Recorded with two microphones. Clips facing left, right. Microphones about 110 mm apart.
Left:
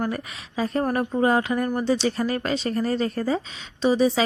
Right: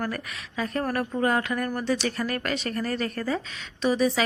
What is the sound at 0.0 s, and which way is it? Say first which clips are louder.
A woman's voice: left 3 dB; 25° left (ahead or behind).